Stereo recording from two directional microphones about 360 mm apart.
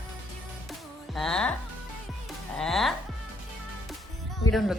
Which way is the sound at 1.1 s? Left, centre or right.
Centre.